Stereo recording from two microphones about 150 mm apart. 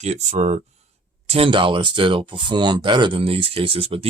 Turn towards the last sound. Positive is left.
turn(degrees=-40)  # may be behind; listen again after turning